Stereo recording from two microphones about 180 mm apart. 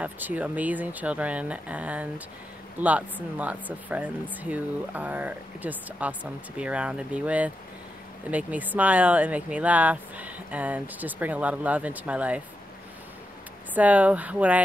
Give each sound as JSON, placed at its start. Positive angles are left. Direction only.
{"t": 0.0, "sound": "speech", "side_deg": -10}
{"t": 13.7, "sound": "speech", "side_deg": -10}